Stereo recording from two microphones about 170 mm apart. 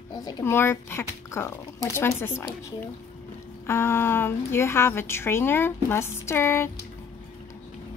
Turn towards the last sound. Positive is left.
turn(degrees=15)  # may be behind; listen again after turning